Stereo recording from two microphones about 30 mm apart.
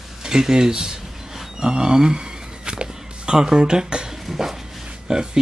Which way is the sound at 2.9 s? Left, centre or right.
Right.